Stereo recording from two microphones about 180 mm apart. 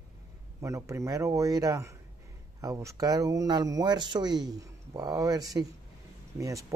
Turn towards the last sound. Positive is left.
turn(degrees=-15)  # may be behind; listen again after turning